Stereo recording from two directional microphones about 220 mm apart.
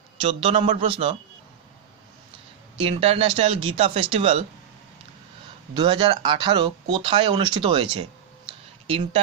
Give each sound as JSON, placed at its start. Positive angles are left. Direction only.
{"t": 0.2, "sound": "speech", "side_deg": -25}
{"t": 2.8, "sound": "speech", "side_deg": -25}
{"t": 5.8, "sound": "speech", "side_deg": -20}